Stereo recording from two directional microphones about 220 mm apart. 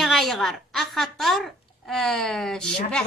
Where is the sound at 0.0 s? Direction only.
Centre (ahead or behind).